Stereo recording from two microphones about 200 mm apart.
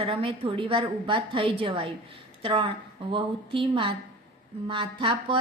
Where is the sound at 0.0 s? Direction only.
25° right (ahead or behind).